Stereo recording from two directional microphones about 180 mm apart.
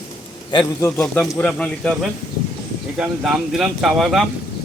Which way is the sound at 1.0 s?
5° left (ahead or behind).